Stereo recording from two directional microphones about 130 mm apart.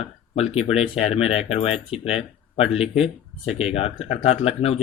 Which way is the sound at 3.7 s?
50° left (ahead or behind).